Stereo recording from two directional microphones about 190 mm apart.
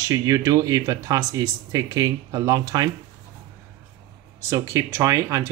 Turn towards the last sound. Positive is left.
turn(degrees=-15)  # may be behind; listen again after turning